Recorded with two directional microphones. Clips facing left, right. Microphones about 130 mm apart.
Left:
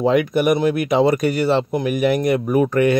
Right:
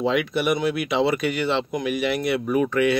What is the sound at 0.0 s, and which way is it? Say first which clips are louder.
Speech: left 6 dB; 45° left (ahead or behind).